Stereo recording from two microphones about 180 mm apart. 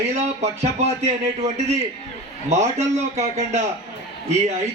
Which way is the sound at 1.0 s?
40° right (ahead or behind).